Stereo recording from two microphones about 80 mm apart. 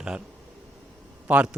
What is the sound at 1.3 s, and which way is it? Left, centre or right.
Speech, centre.